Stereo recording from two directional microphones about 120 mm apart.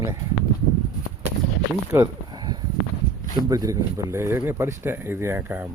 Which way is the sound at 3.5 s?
30° right (ahead or behind).